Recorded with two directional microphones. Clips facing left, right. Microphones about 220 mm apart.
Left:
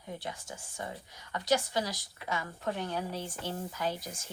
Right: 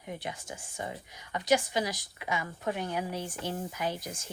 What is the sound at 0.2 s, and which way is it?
Speech, 15° right (ahead or behind).